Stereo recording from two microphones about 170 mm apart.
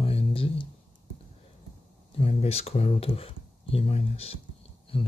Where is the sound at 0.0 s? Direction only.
35° left (ahead or behind).